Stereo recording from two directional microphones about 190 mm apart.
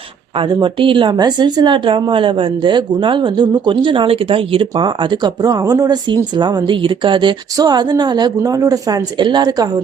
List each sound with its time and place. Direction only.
0.3 s speech: 25° right (ahead or behind)